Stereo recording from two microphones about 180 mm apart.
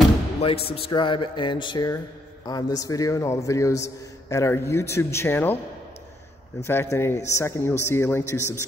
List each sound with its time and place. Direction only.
0.4 s a man's voice: 30° left (ahead or behind); by 5.6 s 10° left (ahead or behind)
6.6 s a man's voice: 15° left (ahead or behind)